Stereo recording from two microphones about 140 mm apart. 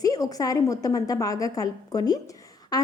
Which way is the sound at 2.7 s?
30° left (ahead or behind).